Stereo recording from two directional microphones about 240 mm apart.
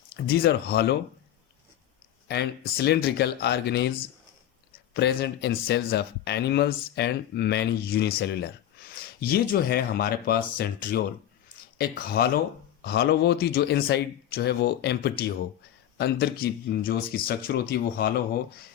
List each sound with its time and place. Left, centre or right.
0.3 s speech: left
2.2 s speech: left